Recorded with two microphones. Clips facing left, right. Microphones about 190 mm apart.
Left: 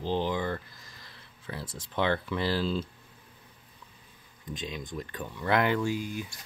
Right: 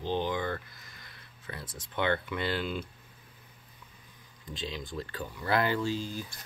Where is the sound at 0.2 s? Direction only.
25° left (ahead or behind).